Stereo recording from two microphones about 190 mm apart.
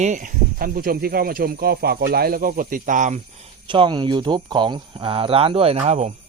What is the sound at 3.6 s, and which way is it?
Speech, 25° right (ahead or behind).